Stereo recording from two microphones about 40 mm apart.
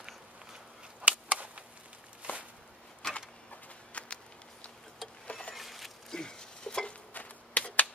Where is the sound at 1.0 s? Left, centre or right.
Right.